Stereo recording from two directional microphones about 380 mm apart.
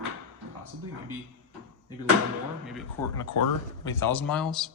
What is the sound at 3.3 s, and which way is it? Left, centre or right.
Speech, left.